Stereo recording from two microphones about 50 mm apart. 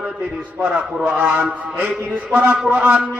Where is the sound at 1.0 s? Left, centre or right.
Right.